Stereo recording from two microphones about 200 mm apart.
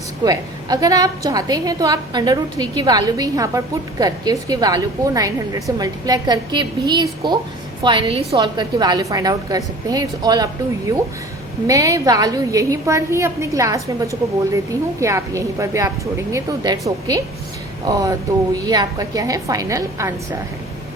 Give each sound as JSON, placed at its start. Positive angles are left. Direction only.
{"t": 0.3, "sound": "a woman's voice", "side_deg": -20}